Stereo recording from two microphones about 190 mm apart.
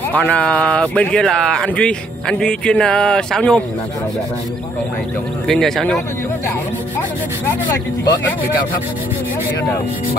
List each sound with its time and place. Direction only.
0.1 s speech: 5° left (ahead or behind)
5.5 s speech: centre (ahead or behind)